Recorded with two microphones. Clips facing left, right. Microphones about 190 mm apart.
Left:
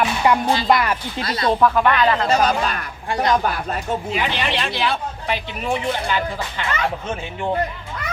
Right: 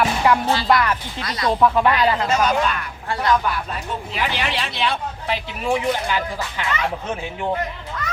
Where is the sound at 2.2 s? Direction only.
35° left (ahead or behind).